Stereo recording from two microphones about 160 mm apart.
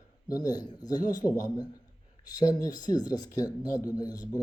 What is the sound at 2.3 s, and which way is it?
Speech, 25° left (ahead or behind).